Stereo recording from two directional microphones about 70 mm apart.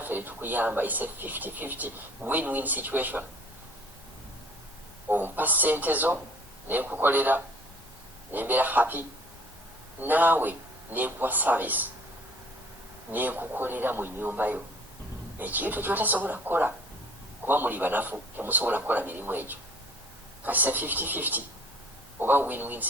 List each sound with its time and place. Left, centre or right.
0.0 s speech: right
5.0 s speech: right
13.1 s speech: right